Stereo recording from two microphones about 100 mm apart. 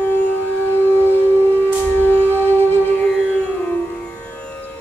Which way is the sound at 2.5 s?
20° left (ahead or behind).